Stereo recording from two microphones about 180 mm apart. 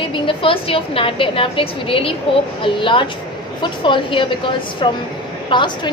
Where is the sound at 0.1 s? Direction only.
30° left (ahead or behind).